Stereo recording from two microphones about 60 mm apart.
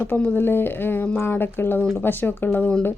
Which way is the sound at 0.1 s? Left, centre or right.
Left.